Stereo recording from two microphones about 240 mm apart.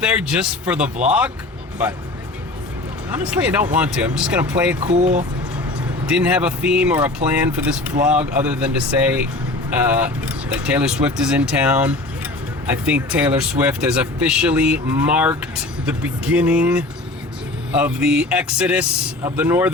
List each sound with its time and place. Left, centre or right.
0.0 s speech: centre
3.2 s speech: centre
4.9 s speech: right
6.1 s speech: centre